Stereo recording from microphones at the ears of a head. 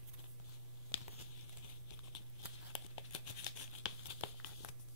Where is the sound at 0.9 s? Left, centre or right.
Left.